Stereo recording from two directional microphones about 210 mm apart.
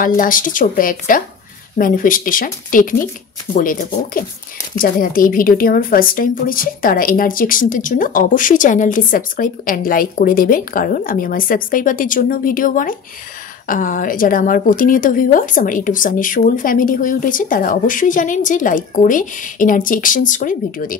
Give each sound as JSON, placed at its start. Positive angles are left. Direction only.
{"t": 0.0, "sound": "speech", "side_deg": 40}